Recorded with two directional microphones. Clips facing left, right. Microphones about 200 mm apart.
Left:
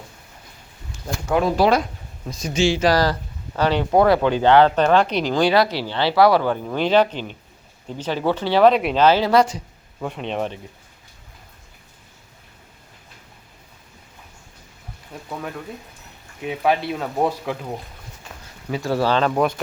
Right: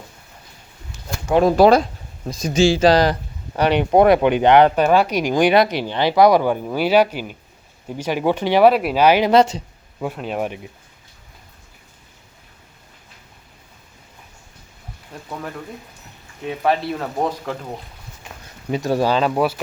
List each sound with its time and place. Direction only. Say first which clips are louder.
1.5 s speech: right 6 dB; 45° right (ahead or behind)
1.8 s speech: right 2 dB; 35° right (ahead or behind)
10.0 s speech: right 1 dB; 5° right (ahead or behind)
15.1 s speech: even; centre (ahead or behind)
18.7 s speech: right 2 dB; 15° right (ahead or behind)